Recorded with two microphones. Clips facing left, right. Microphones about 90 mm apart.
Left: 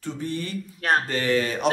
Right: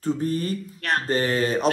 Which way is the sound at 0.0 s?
40° right (ahead or behind).